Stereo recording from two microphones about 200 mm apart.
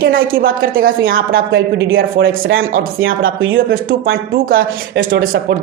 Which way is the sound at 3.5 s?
45° right (ahead or behind).